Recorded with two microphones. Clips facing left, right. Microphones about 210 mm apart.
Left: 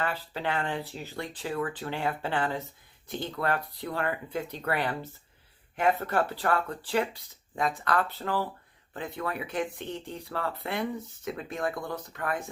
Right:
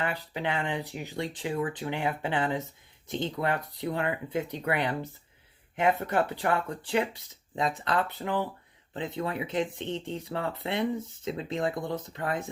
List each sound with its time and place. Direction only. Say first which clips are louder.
0.0 s speech: even; 20° right (ahead or behind)